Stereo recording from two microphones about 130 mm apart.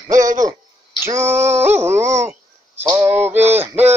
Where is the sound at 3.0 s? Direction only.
15° right (ahead or behind).